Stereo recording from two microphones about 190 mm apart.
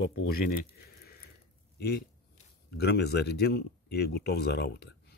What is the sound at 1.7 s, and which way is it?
Speech, 60° left (ahead or behind).